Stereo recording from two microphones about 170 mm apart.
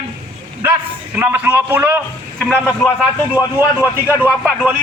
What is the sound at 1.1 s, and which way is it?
Speech, 10° right (ahead or behind).